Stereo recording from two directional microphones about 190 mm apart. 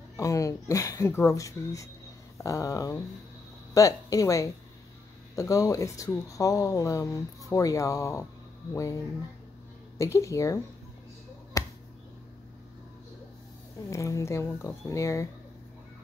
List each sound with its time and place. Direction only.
0.2 s speech: 15° left (ahead or behind)
11.6 s a sound: 15° left (ahead or behind)
13.8 s speech: 15° left (ahead or behind)